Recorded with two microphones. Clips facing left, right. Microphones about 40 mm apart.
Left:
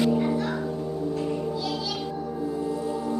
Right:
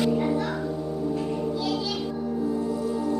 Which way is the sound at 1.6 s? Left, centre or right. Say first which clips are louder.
Right 2 dB; centre.